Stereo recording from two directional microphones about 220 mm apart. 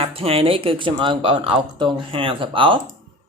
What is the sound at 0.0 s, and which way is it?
Speech, 25° right (ahead or behind).